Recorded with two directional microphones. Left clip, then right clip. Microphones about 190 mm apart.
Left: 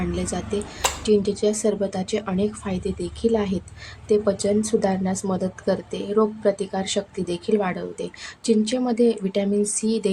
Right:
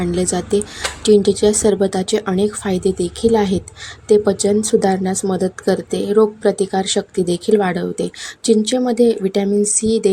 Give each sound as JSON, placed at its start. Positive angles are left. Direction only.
{"t": 0.0, "sound": "speech", "side_deg": -30}